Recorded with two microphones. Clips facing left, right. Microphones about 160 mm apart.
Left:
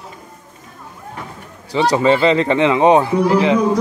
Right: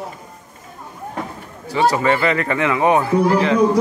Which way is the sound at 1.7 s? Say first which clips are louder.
Left 2 dB; 20° left (ahead or behind).